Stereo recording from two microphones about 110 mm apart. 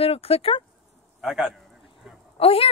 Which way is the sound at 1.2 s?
5° right (ahead or behind).